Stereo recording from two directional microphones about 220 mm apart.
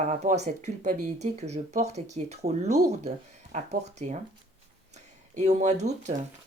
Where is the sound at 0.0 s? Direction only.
30° right (ahead or behind).